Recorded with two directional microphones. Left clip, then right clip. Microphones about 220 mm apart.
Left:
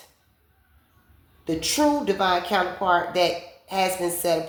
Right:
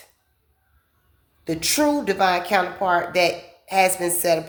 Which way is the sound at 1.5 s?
40° right (ahead or behind).